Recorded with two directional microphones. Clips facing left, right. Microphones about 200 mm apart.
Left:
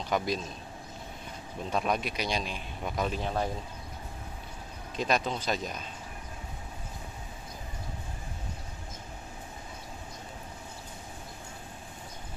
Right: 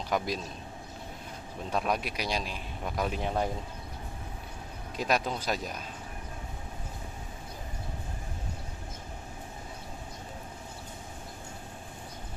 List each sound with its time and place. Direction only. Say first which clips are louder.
0.1 s a man's voice: even; centre (ahead or behind)
1.7 s a man's voice: even; centre (ahead or behind)
3.1 s speech: right 1 dB; 15° right (ahead or behind)
4.9 s speech: even; 5° right (ahead or behind)